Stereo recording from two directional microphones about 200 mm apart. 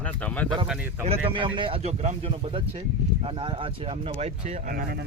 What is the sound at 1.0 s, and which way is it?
Speech, 30° right (ahead or behind).